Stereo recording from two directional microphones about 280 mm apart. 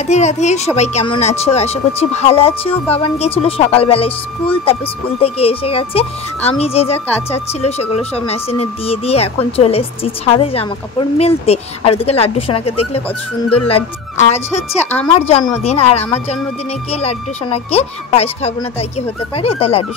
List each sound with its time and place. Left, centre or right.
0.0 s speech: left
13.7 s speech: left